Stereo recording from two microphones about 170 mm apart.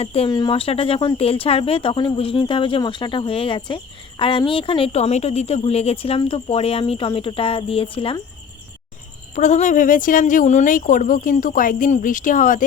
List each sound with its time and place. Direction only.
0.0 s a woman's voice: 35° left (ahead or behind)
0.3 s a woman's voice: 25° left (ahead or behind)
9.3 s speech: 45° left (ahead or behind)